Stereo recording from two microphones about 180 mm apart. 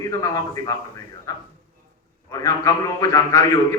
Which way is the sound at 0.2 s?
20° left (ahead or behind).